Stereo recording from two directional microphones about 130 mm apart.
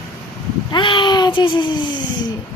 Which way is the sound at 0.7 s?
40° left (ahead or behind).